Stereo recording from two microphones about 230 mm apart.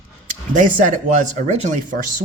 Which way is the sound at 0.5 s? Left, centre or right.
Right.